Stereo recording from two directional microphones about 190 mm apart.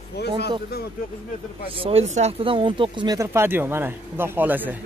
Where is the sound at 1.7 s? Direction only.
30° right (ahead or behind).